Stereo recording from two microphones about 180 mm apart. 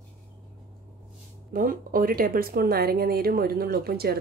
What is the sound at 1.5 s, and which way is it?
Speech, 50° right (ahead or behind).